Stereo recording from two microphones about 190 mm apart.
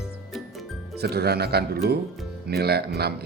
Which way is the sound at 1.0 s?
55° right (ahead or behind).